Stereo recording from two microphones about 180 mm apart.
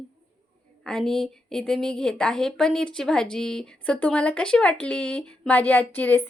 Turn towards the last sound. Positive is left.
turn(degrees=10)  # may be behind; listen again after turning